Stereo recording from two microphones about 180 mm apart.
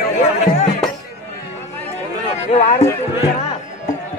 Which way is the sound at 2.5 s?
35° left (ahead or behind).